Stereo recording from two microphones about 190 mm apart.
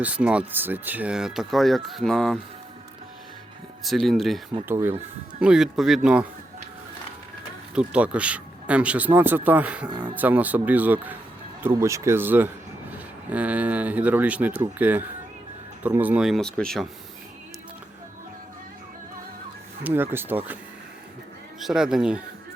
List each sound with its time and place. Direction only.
0.0 s speech: 5° right (ahead or behind)
3.8 s speech: centre (ahead or behind)
4.7 s speech: 10° right (ahead or behind)
7.8 s speech: 5° right (ahead or behind)
19.8 s speech: 10° right (ahead or behind)
21.6 s speech: 5° right (ahead or behind)